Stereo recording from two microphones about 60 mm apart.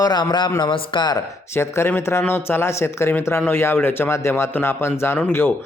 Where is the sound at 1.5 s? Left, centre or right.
Left.